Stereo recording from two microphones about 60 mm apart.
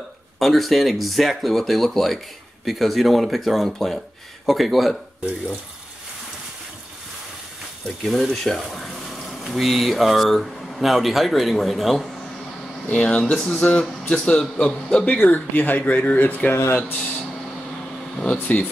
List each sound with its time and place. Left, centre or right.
0.4 s speech: centre
8.0 s speech: centre
13.0 s speech: centre; by 16.5 s left
18.1 s speech: centre